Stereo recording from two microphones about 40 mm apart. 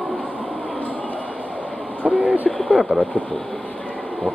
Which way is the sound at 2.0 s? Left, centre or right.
Right.